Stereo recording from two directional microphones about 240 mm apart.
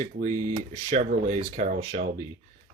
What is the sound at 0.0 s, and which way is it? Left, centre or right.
Speech, right.